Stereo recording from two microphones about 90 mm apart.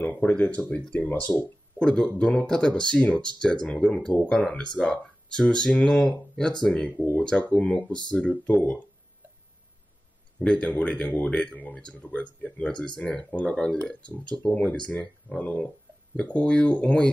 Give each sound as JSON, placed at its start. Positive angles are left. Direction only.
{"t": 0.0, "sound": "speech", "side_deg": 15}
{"t": 10.4, "sound": "speech", "side_deg": 10}